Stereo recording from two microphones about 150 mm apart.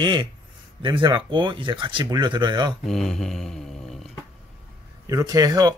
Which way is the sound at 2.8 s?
Centre (ahead or behind).